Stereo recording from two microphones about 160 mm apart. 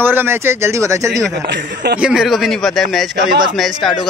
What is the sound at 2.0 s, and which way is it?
Speech, 5° right (ahead or behind).